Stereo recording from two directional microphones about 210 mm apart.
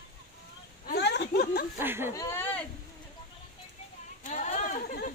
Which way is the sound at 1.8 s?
10° right (ahead or behind).